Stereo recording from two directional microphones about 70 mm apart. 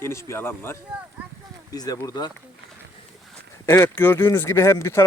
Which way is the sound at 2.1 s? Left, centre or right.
Left.